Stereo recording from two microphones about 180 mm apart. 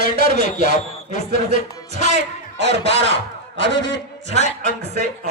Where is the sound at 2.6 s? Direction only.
75° right (ahead or behind).